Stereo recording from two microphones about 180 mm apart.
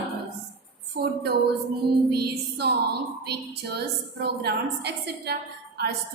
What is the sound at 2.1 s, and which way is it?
A woman's voice, 65° right (ahead or behind).